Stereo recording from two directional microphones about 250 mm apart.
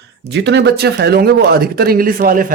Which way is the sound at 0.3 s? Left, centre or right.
Right.